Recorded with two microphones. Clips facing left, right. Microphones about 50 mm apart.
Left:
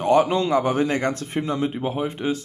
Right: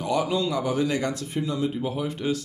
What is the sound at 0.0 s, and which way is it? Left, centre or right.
A man's voice, left.